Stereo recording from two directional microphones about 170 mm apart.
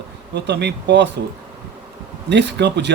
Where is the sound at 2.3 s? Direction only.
90° right.